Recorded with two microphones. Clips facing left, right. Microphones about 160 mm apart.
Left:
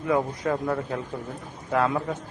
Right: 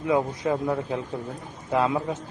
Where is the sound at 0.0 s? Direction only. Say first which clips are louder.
Right 1 dB; 20° right (ahead or behind).